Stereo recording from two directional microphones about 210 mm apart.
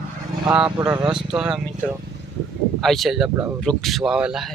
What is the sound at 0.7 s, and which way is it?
Speech, 20° right (ahead or behind).